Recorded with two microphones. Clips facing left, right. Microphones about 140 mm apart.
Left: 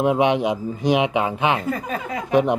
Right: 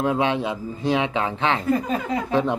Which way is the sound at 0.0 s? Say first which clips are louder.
Left 4 dB; 20° left (ahead or behind).